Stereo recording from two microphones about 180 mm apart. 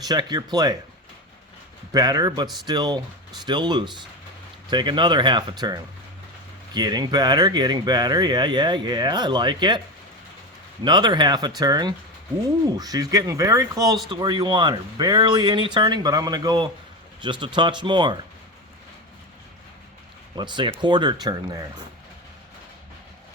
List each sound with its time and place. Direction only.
0.0 s speech: 20° right (ahead or behind)
1.9 s speech: 20° right (ahead or behind)
10.8 s speech: 25° right (ahead or behind)
20.3 s speech: 25° right (ahead or behind)